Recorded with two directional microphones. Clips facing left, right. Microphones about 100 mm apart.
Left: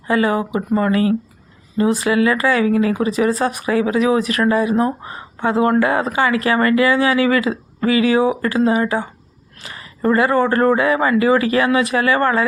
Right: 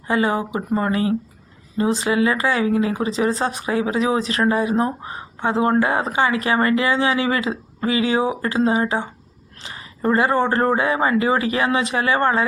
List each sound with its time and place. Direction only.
0.1 s speech: 25° right (ahead or behind)